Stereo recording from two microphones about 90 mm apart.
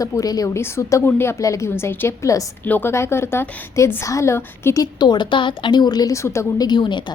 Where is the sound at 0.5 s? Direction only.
30° left (ahead or behind).